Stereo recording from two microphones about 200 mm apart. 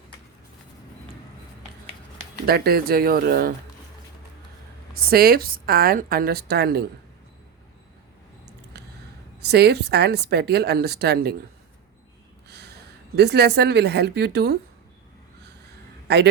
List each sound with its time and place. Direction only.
2.5 s a woman's voice: 50° right (ahead or behind)
4.9 s a woman's voice: 50° right (ahead or behind)
8.7 s a sound: 55° right (ahead or behind)
9.4 s a woman's voice: 55° right (ahead or behind)
12.5 s speech: 55° right (ahead or behind)